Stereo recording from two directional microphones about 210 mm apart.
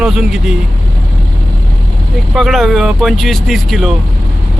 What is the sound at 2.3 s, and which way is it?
Speech, centre (ahead or behind).